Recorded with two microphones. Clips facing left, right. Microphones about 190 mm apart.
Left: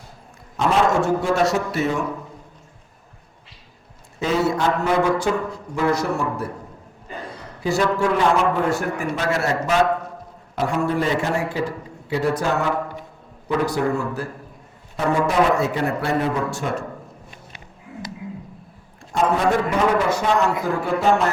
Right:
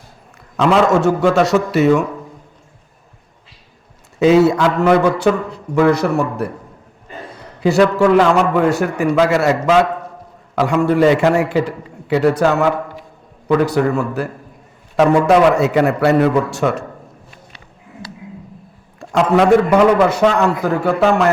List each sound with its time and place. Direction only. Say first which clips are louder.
0.5 s a man's voice: right 6 dB; 85° right
4.2 s a man's voice: right 9 dB; 80° right
7.6 s a man's voice: right 8 dB; 70° right (ahead or behind)
13.7 s a man's voice: right 5 dB; 70° right (ahead or behind)
14.9 s a man's voice: right 8 dB; 80° right
18.9 s a man's voice: right 7 dB; 90° right